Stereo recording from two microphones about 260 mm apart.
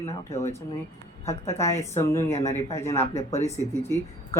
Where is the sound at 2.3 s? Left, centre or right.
Left.